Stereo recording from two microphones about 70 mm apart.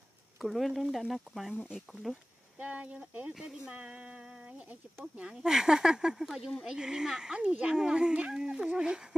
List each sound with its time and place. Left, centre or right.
0.4 s speech: centre
2.6 s speech: centre
5.3 s speech: centre